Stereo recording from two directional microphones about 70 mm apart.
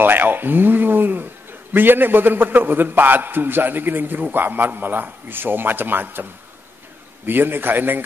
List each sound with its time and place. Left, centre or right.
0.0 s a man's voice: right
7.2 s a man's voice: right